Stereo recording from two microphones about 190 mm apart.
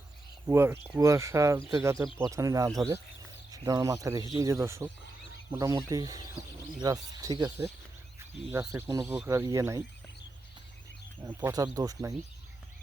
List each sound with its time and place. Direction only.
0.4 s speech: 10° right (ahead or behind)
11.2 s speech: 10° right (ahead or behind)